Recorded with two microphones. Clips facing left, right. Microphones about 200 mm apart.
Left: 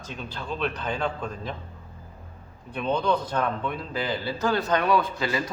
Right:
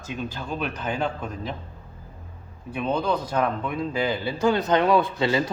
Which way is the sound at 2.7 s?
5° right (ahead or behind).